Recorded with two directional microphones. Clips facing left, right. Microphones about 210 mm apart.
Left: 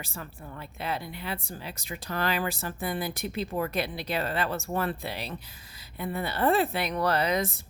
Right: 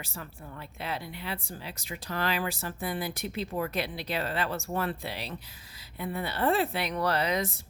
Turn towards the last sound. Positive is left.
turn(degrees=50)  # may be behind; listen again after turning